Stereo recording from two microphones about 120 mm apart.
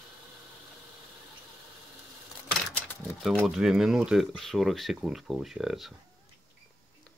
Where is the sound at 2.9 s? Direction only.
15° left (ahead or behind).